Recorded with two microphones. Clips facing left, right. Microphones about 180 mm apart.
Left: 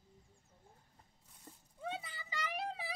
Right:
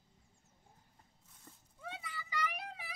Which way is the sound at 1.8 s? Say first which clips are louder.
Left 4 dB; 25° left (ahead or behind).